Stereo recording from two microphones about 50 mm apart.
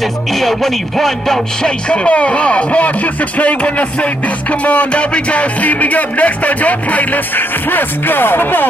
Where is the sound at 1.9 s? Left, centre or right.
Left.